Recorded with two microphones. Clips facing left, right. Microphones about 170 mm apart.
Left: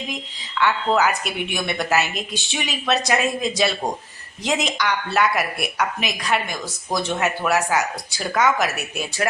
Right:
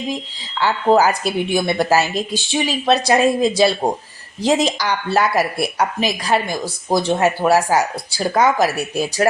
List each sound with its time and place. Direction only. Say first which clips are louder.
0.1 s speech: right 5 dB; 30° right (ahead or behind)